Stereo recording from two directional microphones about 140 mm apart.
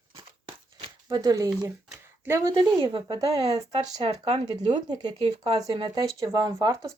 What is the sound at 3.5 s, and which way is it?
Speech, 45° right (ahead or behind).